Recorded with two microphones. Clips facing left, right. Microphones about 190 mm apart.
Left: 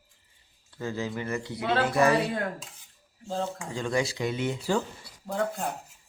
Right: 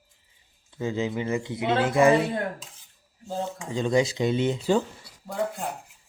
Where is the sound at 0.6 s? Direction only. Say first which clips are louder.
Right 4 dB; 20° right (ahead or behind).